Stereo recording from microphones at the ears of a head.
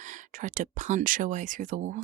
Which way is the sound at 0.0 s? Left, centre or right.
Right.